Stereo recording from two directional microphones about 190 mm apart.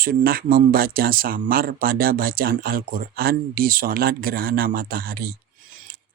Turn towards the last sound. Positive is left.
turn(degrees=-50)  # may be behind; listen again after turning